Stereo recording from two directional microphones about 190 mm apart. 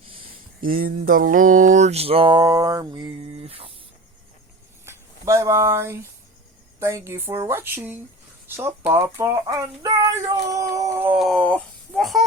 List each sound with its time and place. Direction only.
0.6 s mantra: 50° right (ahead or behind); by 3.7 s 30° right (ahead or behind)
4.9 s speech: 15° right (ahead or behind)
11.2 s speech: 5° left (ahead or behind)